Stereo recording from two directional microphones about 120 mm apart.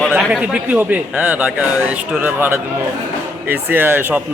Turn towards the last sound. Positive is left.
turn(degrees=-15)  # may be behind; listen again after turning